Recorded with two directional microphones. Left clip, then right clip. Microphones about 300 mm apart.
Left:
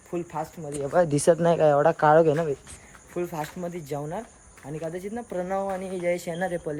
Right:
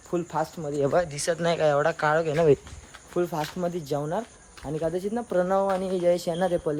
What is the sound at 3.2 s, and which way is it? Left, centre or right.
Speech, centre.